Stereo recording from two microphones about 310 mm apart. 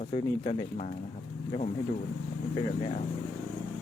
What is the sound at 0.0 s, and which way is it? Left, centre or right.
Speech, centre.